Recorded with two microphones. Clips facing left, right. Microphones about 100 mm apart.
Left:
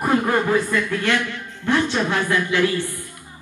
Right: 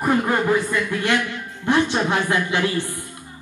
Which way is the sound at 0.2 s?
15° right (ahead or behind).